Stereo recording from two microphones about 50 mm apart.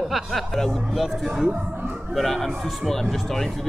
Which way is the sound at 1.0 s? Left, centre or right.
Centre.